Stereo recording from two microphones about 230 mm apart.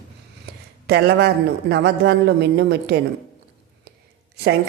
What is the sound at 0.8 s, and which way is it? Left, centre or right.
A man's voice, right.